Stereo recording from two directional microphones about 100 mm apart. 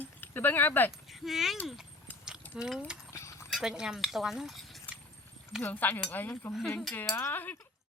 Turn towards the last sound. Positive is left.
turn(degrees=20)  # may be behind; listen again after turning